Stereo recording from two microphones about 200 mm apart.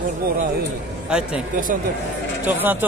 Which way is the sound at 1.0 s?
5° right (ahead or behind).